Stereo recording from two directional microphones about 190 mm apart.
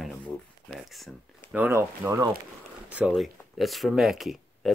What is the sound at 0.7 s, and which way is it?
Speech, centre (ahead or behind).